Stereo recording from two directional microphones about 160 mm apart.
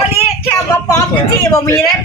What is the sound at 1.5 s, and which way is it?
Speech, 20° left (ahead or behind).